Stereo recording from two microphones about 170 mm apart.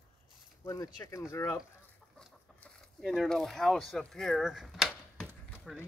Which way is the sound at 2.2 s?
Centre (ahead or behind).